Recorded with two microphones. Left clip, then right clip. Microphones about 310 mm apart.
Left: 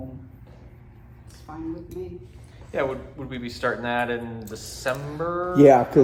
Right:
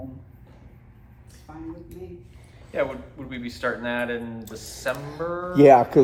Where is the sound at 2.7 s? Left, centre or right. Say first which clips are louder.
Even; centre.